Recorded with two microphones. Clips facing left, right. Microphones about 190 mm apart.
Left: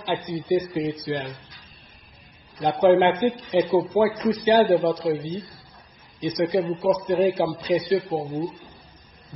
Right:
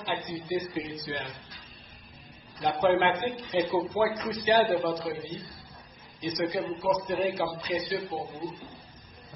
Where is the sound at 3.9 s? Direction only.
30° left (ahead or behind).